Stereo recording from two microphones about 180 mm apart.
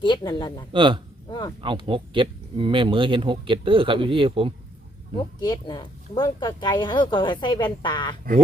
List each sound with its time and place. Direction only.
0.0 s speech: 25° left (ahead or behind)
0.7 s speech: 25° right (ahead or behind)
1.3 s a sound: 25° left (ahead or behind)
1.6 s speech: 25° right (ahead or behind)
5.1 s speech: 25° left (ahead or behind)